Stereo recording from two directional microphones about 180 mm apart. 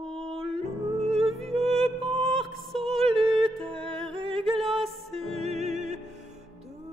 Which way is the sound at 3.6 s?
30° right (ahead or behind).